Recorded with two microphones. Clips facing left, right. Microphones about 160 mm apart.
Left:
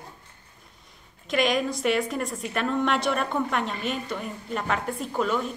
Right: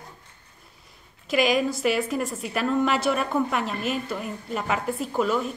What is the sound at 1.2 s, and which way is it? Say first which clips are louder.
A woman's voice: right 2 dB; 5° right (ahead or behind).